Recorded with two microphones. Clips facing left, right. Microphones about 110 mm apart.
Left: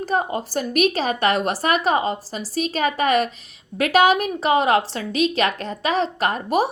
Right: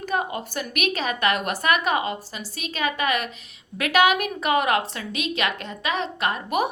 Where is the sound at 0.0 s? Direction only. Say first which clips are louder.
Left 4 dB; 35° left (ahead or behind).